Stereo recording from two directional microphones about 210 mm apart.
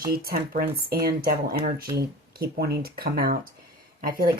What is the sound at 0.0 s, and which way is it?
Speech, 45° right (ahead or behind).